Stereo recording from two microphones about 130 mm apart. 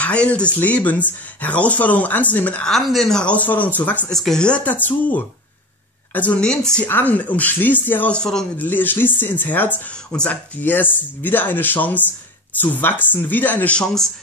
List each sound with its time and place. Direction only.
0.0 s speech: 10° left (ahead or behind)